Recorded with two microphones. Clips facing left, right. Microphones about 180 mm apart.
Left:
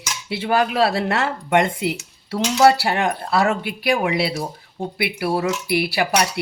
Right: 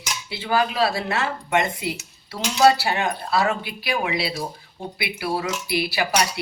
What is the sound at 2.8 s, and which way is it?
Speech, 55° left (ahead or behind).